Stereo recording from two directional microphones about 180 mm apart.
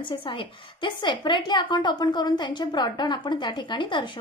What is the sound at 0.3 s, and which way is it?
A woman's voice, 25° left (ahead or behind).